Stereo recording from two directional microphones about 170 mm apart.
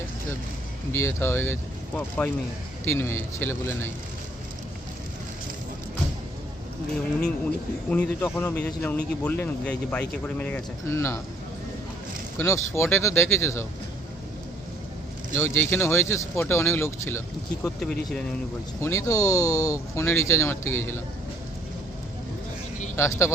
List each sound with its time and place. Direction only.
0.9 s speech: 15° left (ahead or behind)
7.9 s speech: 10° left (ahead or behind)
12.4 s speech: 15° left (ahead or behind)
15.4 s speech: 15° left (ahead or behind)
18.8 s speech: 15° left (ahead or behind)
23.0 s speech: 15° left (ahead or behind)